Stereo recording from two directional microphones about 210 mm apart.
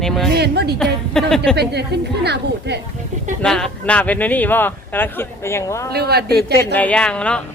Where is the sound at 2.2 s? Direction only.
50° right (ahead or behind).